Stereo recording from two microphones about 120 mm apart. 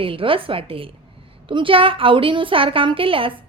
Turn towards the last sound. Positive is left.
turn(degrees=-50)  # may be behind; listen again after turning